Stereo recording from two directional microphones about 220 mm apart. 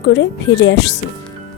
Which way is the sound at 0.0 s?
50° left (ahead or behind).